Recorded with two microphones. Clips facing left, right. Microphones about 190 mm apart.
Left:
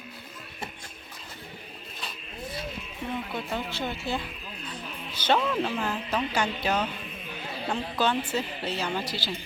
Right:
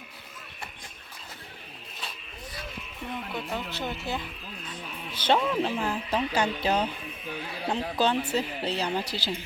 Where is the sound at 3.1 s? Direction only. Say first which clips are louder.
Left 1 dB; centre (ahead or behind).